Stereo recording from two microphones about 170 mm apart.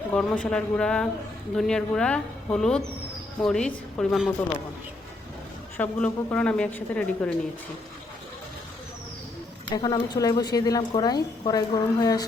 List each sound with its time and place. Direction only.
0.1 s speech: 5° left (ahead or behind)
5.7 s a woman's voice: 10° left (ahead or behind)
9.7 s a woman's voice: 25° left (ahead or behind)